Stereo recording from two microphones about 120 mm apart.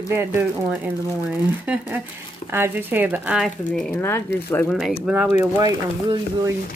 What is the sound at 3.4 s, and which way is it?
Speech, 5° left (ahead or behind).